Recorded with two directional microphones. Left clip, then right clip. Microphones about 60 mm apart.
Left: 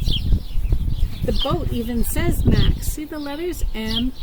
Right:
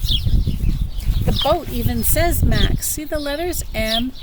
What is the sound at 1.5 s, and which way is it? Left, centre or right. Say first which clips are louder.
Speech: right 5 dB; right.